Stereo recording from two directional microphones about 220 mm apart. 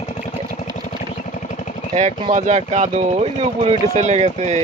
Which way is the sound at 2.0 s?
30° right (ahead or behind).